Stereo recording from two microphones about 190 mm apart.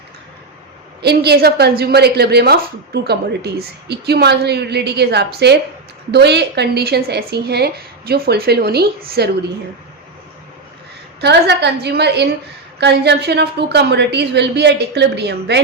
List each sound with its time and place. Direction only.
1.0 s a woman's voice: 60° right (ahead or behind)
11.2 s a woman's voice: 60° right (ahead or behind)